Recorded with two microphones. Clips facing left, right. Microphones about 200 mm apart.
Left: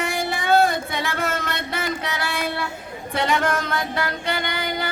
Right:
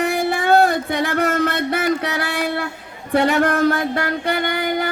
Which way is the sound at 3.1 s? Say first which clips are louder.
Right 6 dB; 55° right (ahead or behind).